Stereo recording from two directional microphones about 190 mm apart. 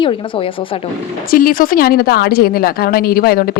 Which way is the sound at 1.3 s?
50° left (ahead or behind).